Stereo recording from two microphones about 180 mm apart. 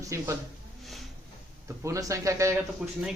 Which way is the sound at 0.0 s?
15° right (ahead or behind).